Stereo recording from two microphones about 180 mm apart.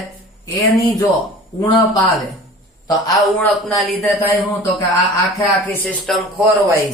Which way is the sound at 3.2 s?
Centre (ahead or behind).